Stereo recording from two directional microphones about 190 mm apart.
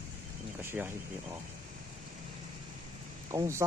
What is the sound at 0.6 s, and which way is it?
Speech, 10° right (ahead or behind).